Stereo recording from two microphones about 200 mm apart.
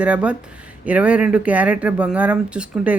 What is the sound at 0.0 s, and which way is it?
Speech, 5° right (ahead or behind).